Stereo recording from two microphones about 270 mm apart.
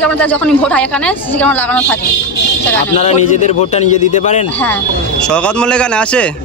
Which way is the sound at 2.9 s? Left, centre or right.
Left.